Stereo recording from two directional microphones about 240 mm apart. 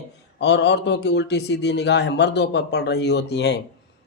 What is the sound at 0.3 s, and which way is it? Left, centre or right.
A man's voice, left.